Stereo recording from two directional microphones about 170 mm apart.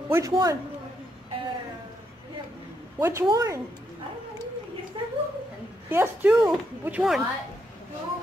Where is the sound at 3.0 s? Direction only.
15° right (ahead or behind).